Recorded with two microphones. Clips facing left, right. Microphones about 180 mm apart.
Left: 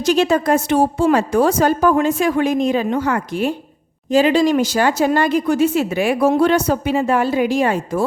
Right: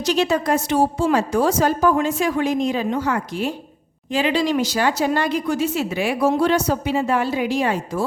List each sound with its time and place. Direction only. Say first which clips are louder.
0.0 s a woman's voice: left 4 dB; 50° left (ahead or behind)
4.1 s speech: left 6 dB; 45° left (ahead or behind)